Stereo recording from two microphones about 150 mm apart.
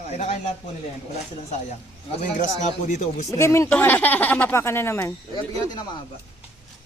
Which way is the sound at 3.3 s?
20° left (ahead or behind).